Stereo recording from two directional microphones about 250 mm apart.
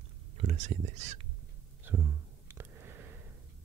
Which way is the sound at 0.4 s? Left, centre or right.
Right.